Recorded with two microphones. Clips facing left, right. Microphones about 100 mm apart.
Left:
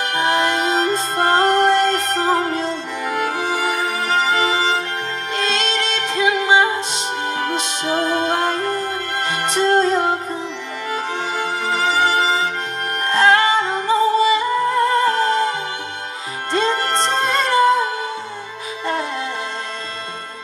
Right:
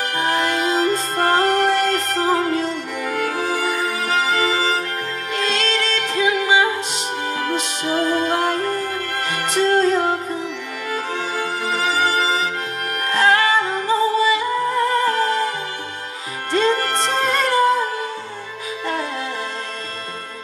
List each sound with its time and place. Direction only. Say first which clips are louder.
0.1 s music: left 3 dB; 25° left (ahead or behind)
16.5 s music: even; 20° left (ahead or behind)